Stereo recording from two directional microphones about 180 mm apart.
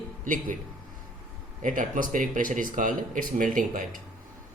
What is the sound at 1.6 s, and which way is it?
Speech, 50° right (ahead or behind).